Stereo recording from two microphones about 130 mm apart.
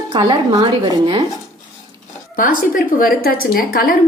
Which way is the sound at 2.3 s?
90° left.